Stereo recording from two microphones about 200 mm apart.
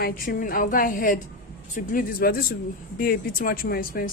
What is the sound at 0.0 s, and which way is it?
A woman's voice, 45° left (ahead or behind).